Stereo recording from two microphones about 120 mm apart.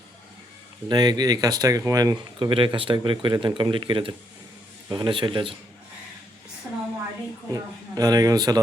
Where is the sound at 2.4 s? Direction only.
45° right (ahead or behind).